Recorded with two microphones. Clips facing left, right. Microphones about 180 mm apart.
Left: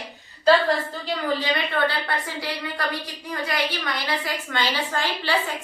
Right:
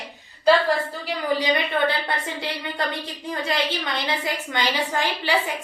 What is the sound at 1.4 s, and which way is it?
A woman's voice, 15° right (ahead or behind).